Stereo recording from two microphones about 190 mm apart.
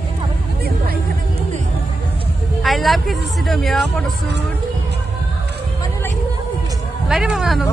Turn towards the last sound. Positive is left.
turn(degrees=0)  # may be behind; listen again after turning